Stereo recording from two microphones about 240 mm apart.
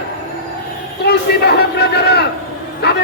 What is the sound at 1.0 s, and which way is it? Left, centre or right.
A man's voice, left.